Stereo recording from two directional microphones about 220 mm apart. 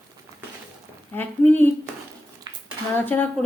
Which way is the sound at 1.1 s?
10° left (ahead or behind).